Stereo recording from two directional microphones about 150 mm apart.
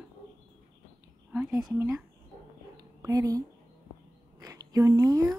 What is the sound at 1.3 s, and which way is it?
Speech, 10° right (ahead or behind).